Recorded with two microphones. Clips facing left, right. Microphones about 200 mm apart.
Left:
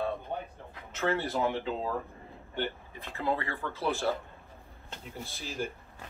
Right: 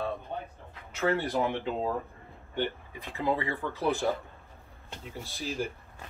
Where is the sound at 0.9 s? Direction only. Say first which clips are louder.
Right 2 dB; 15° right (ahead or behind).